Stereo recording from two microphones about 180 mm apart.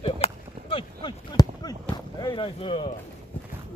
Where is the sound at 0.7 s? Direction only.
25° left (ahead or behind).